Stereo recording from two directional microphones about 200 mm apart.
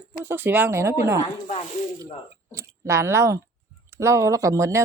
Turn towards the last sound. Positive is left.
turn(degrees=-15)  # may be behind; listen again after turning